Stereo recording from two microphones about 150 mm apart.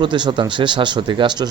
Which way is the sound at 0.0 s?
30° right (ahead or behind).